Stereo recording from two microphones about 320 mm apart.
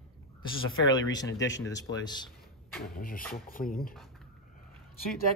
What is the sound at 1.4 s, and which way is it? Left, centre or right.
Speech, left.